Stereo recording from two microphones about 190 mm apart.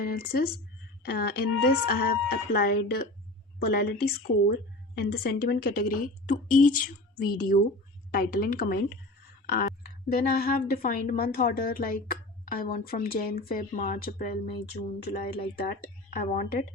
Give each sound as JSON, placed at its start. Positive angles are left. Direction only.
{"t": 0.0, "sound": "a woman's voice", "side_deg": 50}